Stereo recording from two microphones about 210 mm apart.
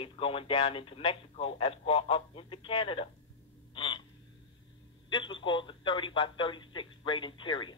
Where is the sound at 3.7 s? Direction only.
25° left (ahead or behind).